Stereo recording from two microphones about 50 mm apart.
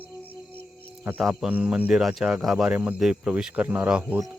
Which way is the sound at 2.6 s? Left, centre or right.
Right.